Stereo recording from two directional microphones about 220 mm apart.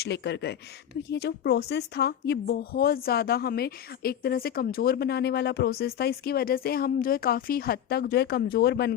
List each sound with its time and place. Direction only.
0.0 s speech: 50° left (ahead or behind)